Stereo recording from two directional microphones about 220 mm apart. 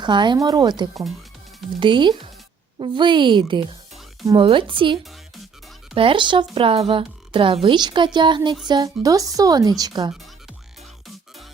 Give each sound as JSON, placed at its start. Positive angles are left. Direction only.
{"t": 0.0, "sound": "a woman's voice", "side_deg": -20}